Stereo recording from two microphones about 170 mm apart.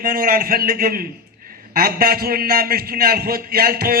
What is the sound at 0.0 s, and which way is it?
A man's voice, 55° right (ahead or behind).